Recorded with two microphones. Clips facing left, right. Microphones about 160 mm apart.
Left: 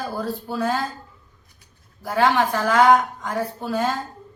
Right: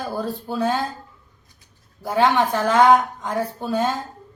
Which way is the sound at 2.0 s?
20° right (ahead or behind).